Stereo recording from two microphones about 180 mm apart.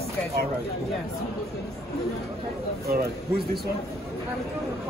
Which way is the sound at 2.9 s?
60° right (ahead or behind).